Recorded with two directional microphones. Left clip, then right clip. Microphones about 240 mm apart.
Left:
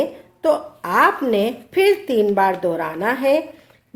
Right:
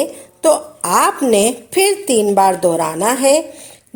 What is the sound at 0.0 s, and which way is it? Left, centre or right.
A woman's voice, right.